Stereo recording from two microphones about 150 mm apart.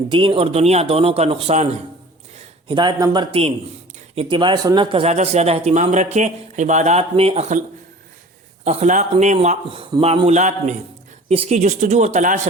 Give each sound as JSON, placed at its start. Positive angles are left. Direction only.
{"t": 0.1, "sound": "a man's voice", "side_deg": -35}
{"t": 2.6, "sound": "a man's voice", "side_deg": -30}
{"t": 8.6, "sound": "speech", "side_deg": -50}
{"t": 9.7, "sound": "speech", "side_deg": -40}